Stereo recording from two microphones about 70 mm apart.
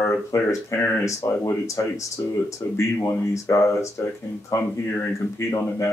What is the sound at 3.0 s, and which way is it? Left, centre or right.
Speech, left.